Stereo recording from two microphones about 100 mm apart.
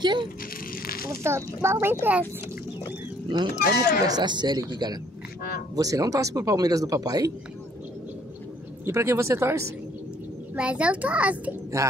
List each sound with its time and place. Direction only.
0.0 s speech: 50° right (ahead or behind)
1.0 s speech: 25° right (ahead or behind)
3.3 s speech: 45° right (ahead or behind)
8.8 s speech: 30° right (ahead or behind)
10.5 s a child's voice: 10° right (ahead or behind)
11.8 s speech: 35° right (ahead or behind)